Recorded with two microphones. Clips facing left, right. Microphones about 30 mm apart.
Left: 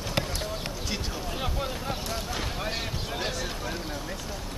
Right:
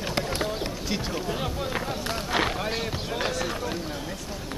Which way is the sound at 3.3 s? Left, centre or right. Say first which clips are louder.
Right 4 dB; centre.